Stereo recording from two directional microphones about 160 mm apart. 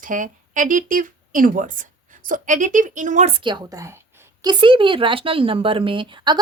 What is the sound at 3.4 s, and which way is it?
A woman's voice, 30° right (ahead or behind).